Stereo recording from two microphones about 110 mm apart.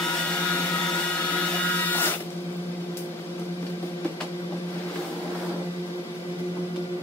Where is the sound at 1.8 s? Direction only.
15° left (ahead or behind).